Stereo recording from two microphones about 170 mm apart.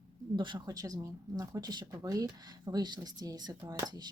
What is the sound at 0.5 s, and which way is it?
Speech, 20° right (ahead or behind).